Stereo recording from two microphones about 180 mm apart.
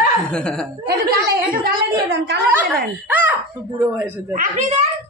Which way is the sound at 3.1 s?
10° right (ahead or behind).